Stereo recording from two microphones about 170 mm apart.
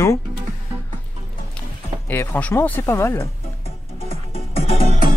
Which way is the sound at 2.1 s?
10° left (ahead or behind).